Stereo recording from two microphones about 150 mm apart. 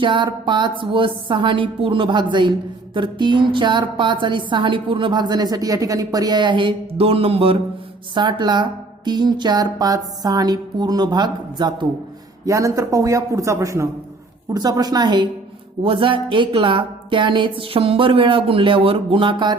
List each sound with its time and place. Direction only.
0.0 s a woman's voice: 30° right (ahead or behind)